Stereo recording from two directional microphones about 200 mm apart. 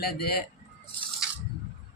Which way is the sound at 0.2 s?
50° left (ahead or behind).